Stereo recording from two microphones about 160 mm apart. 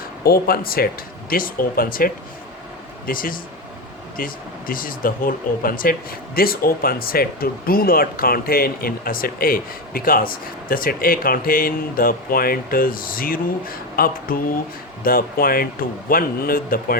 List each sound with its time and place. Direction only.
0.3 s speech: 70° left (ahead or behind)